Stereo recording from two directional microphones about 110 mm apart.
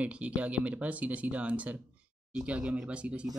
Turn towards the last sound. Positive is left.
turn(degrees=-10)  # may be behind; listen again after turning